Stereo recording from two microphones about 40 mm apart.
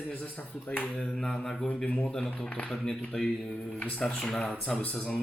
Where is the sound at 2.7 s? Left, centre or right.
Centre.